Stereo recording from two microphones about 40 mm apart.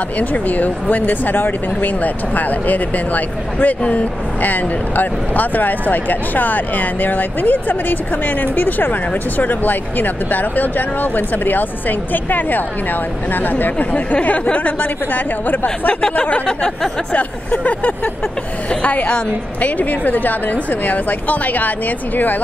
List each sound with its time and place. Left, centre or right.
0.2 s speech: left
16.0 s speech: left
17.1 s speech: left